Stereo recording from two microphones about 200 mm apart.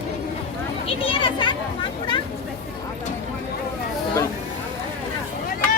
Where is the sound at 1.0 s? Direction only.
25° left (ahead or behind).